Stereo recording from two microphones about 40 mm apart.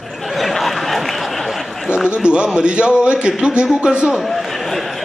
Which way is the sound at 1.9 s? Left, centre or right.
Right.